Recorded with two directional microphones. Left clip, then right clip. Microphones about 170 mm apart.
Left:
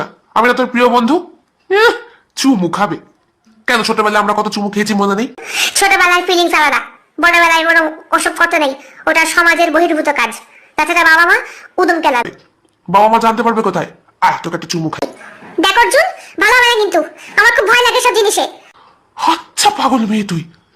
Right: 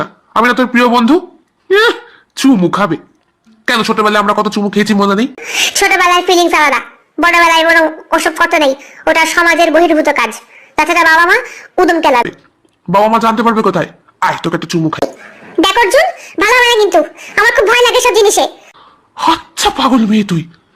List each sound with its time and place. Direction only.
0.0 s speech: 30° right (ahead or behind)
3.7 s speech: 20° right (ahead or behind)
5.4 s a woman's voice: 15° right (ahead or behind)
14.2 s speech: 40° right (ahead or behind)
15.6 s a woman's voice: 15° right (ahead or behind)
18.8 s speech: 30° right (ahead or behind)